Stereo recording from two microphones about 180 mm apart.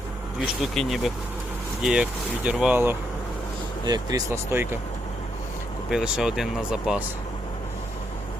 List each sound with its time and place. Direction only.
0.6 s speech: centre (ahead or behind)
3.8 s speech: 20° right (ahead or behind)
5.9 s speech: 5° right (ahead or behind)